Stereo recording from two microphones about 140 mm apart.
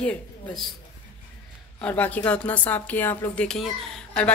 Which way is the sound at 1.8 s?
10° left (ahead or behind).